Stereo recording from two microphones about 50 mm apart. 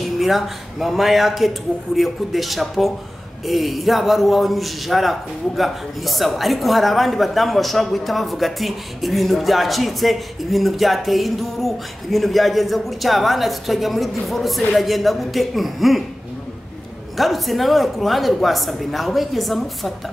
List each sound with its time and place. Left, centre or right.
0.0 s speech: centre
17.2 s speech: centre